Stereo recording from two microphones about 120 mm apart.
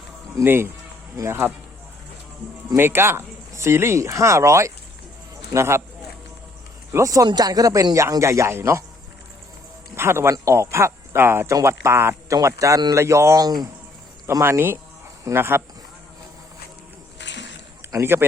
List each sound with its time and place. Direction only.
0.3 s speech: 20° right (ahead or behind)
2.7 s speech: 20° right (ahead or behind)
6.9 s speech: 30° right (ahead or behind)
9.9 s speech: 20° right (ahead or behind)
17.9 s speech: 20° right (ahead or behind)